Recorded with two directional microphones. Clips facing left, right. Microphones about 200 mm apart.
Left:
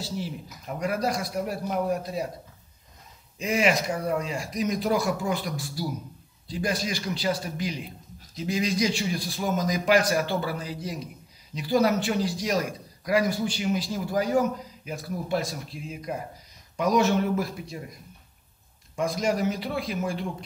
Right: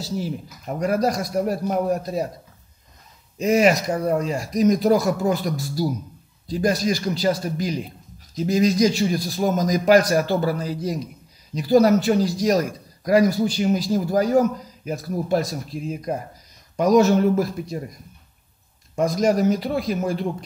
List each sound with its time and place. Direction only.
0.0 s a man's voice: 40° right (ahead or behind)
3.3 s a man's voice: 40° right (ahead or behind)
18.9 s a man's voice: 40° right (ahead or behind)